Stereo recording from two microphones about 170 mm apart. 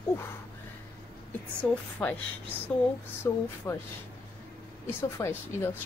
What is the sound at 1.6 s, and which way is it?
Speech, 10° left (ahead or behind).